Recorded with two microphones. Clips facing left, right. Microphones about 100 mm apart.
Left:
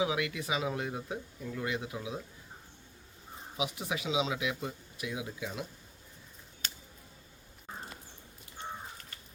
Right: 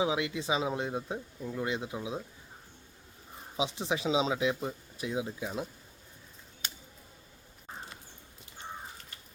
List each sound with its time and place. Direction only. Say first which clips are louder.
0.0 s speech: right 2 dB; 25° right (ahead or behind)
3.6 s speech: right 4 dB; 25° right (ahead or behind)